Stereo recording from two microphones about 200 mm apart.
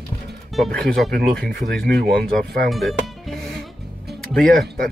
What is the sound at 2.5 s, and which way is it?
Speech, centre (ahead or behind).